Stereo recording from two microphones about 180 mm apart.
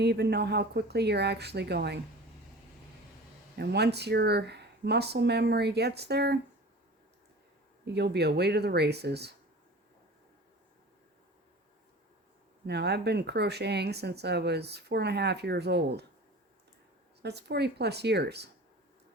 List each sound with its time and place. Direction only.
0.0 s speech: 65° right (ahead or behind)
3.6 s speech: 65° right (ahead or behind)
7.9 s speech: 70° right (ahead or behind)
12.6 s speech: 70° right (ahead or behind)
17.2 s speech: 65° right (ahead or behind)